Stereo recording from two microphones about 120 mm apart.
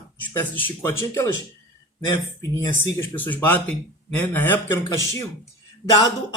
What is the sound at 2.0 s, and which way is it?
Speech, 30° left (ahead or behind).